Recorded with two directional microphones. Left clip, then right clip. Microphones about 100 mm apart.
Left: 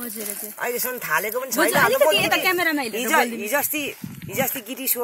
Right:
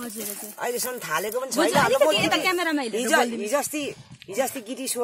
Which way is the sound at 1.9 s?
45° left (ahead or behind).